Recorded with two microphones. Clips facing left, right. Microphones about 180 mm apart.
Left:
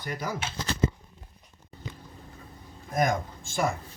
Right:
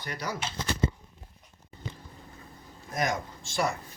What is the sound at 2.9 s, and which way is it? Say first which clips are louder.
Speech: left 4 dB; 50° left (ahead or behind).